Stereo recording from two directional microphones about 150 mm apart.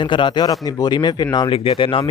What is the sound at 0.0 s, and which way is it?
Speech, 30° left (ahead or behind).